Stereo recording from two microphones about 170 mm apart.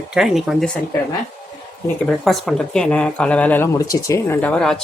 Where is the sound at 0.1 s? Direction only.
5° right (ahead or behind).